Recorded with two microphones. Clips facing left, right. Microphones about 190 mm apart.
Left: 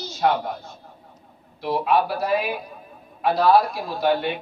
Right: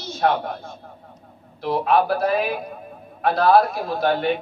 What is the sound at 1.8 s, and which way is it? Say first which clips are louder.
A man's voice: right 3 dB; 55° right (ahead or behind).